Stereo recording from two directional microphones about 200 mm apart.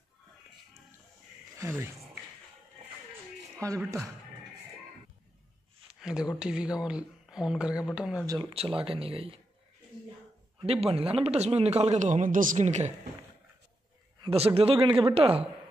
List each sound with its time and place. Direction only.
1.6 s speech: 15° right (ahead or behind)
3.5 s speech: 15° right (ahead or behind)
5.9 s a sound: 5° right (ahead or behind)
6.4 s speech: 5° right (ahead or behind)
8.3 s speech: 25° right (ahead or behind)
10.7 s speech: 30° right (ahead or behind)
14.2 s speech: 30° right (ahead or behind)